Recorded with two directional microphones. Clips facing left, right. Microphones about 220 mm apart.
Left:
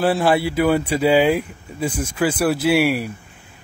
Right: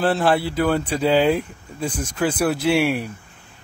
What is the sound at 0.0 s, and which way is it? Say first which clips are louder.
Speech: left 2 dB; 10° left (ahead or behind).